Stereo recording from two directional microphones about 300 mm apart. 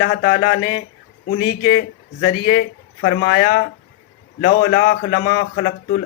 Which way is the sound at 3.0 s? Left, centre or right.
Left.